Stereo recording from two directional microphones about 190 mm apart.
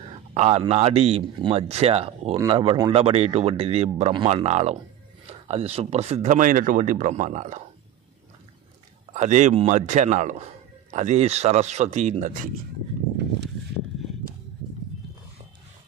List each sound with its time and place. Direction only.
0.1 s speech: 30° right (ahead or behind)
9.1 s speech: 35° right (ahead or behind)
13.4 s a sound: 60° right (ahead or behind)